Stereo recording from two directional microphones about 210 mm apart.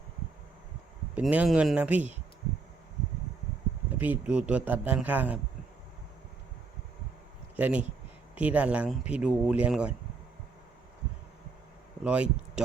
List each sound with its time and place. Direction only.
1.1 s a man's voice: 5° right (ahead or behind)
3.9 s a man's voice: 10° right (ahead or behind)
7.5 s speech: 5° right (ahead or behind)
12.0 s speech: 5° right (ahead or behind)